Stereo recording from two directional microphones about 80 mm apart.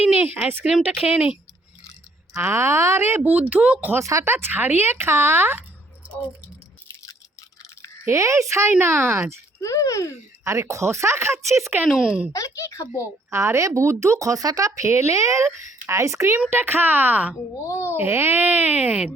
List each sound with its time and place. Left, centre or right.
0.0 s a woman's voice: right
2.4 s speech: right
3.2 s a woman's voice: right
3.9 s speech: right
4.3 s speech: right
8.0 s speech: right
9.6 s a child's voice: left
10.4 s speech: right
11.9 s a woman's voice: centre
12.3 s a child's voice: left
13.0 s speech: right
17.6 s a child's voice: left
17.9 s speech: right